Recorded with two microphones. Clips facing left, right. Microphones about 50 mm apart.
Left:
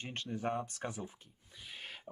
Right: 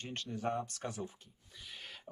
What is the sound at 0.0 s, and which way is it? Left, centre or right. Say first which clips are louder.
Speech: even; left.